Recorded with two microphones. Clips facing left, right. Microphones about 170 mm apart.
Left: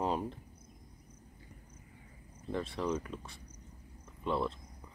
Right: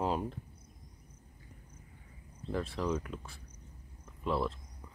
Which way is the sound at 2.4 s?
Centre (ahead or behind).